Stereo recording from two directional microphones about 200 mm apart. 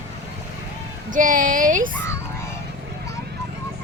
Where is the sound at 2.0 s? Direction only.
10° left (ahead or behind).